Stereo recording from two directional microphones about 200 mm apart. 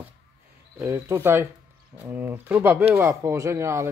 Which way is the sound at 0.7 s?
10° right (ahead or behind).